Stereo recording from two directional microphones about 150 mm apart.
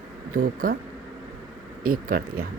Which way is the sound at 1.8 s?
70° right (ahead or behind).